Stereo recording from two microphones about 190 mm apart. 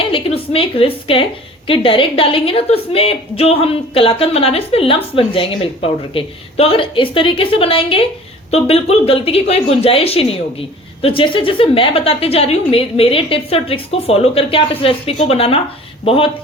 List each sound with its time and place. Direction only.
0.0 s a woman's voice: 30° left (ahead or behind)